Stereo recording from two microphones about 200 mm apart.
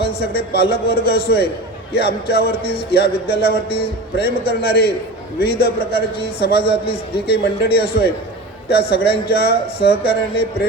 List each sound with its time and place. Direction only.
0.0 s a man's voice: 50° left (ahead or behind)